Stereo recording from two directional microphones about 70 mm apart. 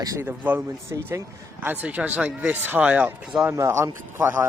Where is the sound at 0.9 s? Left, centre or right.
Right.